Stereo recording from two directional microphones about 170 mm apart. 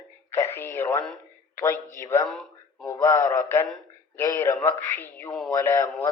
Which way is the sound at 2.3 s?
Centre (ahead or behind).